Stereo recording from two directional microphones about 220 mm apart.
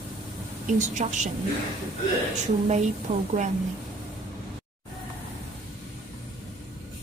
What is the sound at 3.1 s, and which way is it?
Speech, 30° right (ahead or behind).